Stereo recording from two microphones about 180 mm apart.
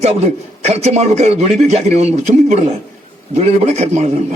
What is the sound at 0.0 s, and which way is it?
A man's voice, 35° right (ahead or behind).